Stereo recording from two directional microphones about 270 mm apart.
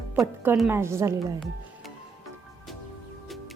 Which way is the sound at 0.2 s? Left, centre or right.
Centre.